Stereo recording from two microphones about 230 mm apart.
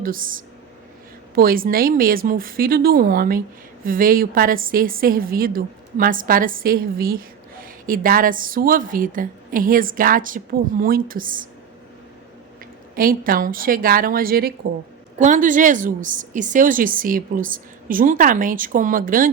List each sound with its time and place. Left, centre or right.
0.0 s a woman's voice: right
13.0 s a woman's voice: right